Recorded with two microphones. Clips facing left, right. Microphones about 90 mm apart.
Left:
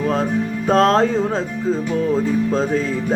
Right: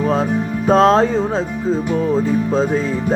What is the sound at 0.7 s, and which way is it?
Music, 40° right (ahead or behind).